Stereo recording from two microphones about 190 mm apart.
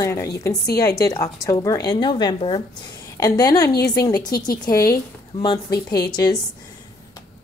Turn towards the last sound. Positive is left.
turn(degrees=20)  # may be behind; listen again after turning